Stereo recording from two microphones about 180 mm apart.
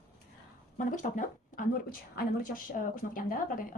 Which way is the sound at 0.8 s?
45° left (ahead or behind).